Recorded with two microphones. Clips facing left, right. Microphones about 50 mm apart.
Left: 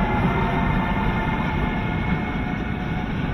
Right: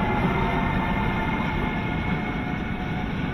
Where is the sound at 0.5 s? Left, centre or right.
Centre.